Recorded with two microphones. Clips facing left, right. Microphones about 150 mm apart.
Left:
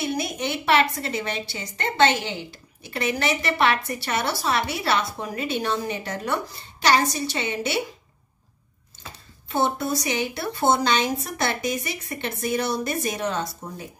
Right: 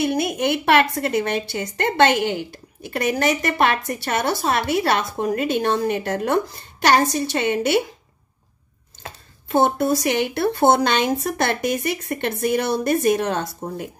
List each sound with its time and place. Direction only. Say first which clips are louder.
0.0 s a woman's voice: right 6 dB; 55° right (ahead or behind)
9.0 s speech: right 5 dB; 55° right (ahead or behind)